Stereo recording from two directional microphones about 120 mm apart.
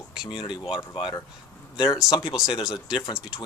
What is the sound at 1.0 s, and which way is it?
Speech, 40° left (ahead or behind).